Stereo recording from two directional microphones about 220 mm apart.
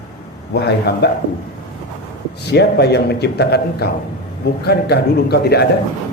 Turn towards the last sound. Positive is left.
turn(degrees=45)  # may be behind; listen again after turning